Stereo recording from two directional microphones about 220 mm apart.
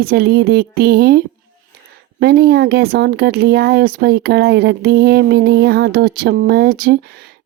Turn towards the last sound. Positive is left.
turn(degrees=-40)  # may be behind; listen again after turning